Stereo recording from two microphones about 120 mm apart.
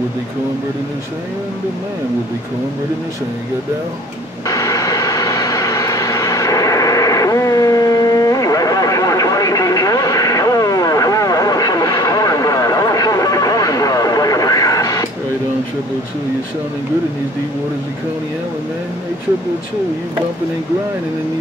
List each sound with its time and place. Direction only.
4.5 s vehicle: 25° left (ahead or behind)